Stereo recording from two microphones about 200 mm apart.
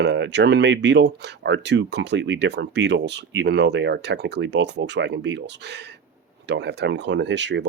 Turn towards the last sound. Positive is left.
turn(degrees=-60)  # may be behind; listen again after turning